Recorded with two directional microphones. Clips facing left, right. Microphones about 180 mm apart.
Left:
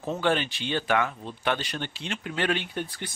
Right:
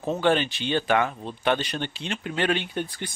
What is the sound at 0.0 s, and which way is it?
Speech, 25° right (ahead or behind).